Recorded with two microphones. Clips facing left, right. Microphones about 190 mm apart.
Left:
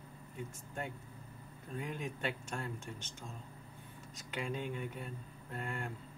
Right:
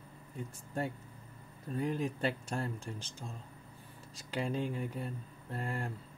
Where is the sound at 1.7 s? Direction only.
35° right (ahead or behind).